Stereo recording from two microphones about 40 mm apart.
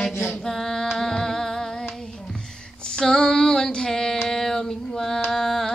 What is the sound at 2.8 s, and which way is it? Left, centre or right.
Female singing, centre.